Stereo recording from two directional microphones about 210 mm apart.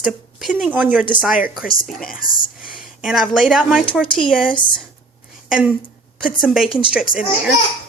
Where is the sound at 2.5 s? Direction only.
5° right (ahead or behind).